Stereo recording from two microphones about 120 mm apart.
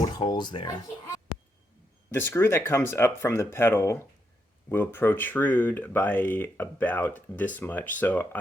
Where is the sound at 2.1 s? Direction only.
20° left (ahead or behind).